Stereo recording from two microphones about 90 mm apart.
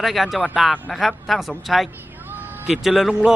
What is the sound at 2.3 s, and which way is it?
Vehicle, 20° right (ahead or behind).